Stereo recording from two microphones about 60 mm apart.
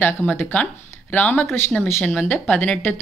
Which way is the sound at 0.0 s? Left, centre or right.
Left.